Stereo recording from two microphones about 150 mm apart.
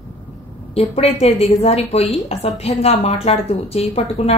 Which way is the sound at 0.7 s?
40° left (ahead or behind).